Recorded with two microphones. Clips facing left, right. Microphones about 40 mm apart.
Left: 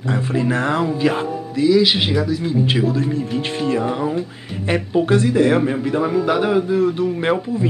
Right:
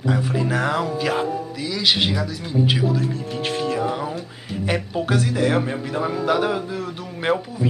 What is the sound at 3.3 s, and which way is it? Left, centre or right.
Speech, left.